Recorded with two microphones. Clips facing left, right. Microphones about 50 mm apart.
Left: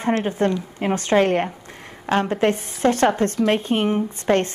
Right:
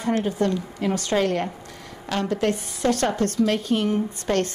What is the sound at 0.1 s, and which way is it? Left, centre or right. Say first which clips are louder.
A woman's voice: left 2 dB; left.